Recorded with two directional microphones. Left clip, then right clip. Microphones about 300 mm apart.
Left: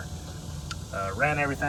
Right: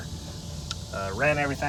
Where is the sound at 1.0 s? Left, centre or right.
Centre.